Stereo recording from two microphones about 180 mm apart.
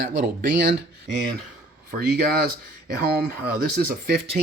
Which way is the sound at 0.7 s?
80° right.